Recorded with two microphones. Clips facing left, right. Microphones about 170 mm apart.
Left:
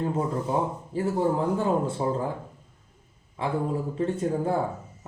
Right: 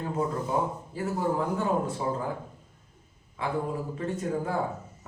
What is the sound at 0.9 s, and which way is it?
Speech, 30° left (ahead or behind).